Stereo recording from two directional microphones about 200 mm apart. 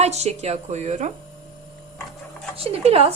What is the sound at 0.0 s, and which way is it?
Speech, 35° right (ahead or behind).